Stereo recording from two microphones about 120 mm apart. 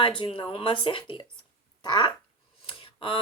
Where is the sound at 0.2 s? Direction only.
45° left (ahead or behind).